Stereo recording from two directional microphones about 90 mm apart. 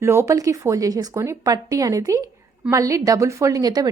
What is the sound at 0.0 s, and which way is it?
Speech, 30° right (ahead or behind).